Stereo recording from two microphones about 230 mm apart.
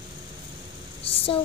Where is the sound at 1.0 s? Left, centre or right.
Left.